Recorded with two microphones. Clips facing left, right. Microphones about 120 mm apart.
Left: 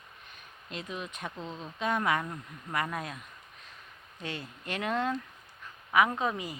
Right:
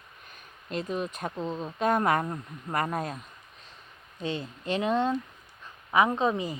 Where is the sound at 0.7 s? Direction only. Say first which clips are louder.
Right 8 dB; 40° right (ahead or behind).